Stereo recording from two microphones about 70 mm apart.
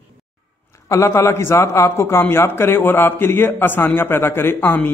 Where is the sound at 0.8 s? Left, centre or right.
Left.